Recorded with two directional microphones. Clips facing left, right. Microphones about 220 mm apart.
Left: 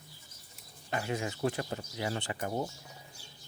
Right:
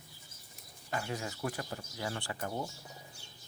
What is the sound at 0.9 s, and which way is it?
Speech, 20° left (ahead or behind).